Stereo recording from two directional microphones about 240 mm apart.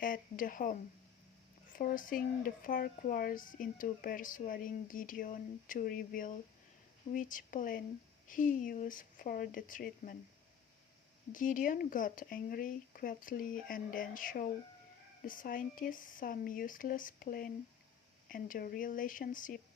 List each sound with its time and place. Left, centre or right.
0.0 s speech: left
11.3 s speech: left